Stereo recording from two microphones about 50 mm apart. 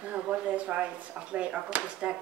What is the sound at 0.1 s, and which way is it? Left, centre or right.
A man's voice, right.